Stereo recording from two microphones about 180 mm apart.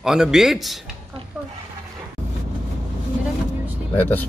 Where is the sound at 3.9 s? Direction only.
10° left (ahead or behind).